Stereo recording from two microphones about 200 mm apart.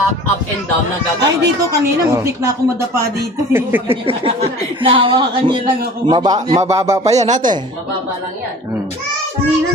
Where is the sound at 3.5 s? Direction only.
10° right (ahead or behind).